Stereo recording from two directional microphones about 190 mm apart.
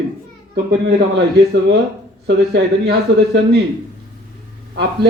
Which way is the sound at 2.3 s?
65° right (ahead or behind).